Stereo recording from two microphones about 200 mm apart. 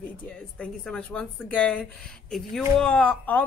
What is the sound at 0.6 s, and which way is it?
A woman's voice, 5° left (ahead or behind).